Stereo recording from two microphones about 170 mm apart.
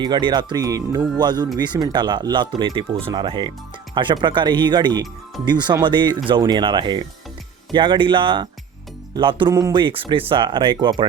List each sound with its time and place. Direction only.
0.0 s speech: 25° right (ahead or behind)